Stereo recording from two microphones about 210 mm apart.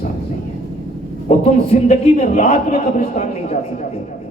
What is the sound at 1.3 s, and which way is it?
A man's voice, 30° left (ahead or behind).